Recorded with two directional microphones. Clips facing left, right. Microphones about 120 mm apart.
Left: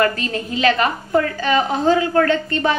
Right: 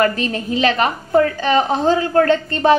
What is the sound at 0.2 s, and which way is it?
A woman's voice, 30° right (ahead or behind).